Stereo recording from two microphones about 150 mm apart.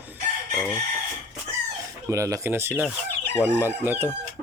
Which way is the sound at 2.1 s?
20° right (ahead or behind).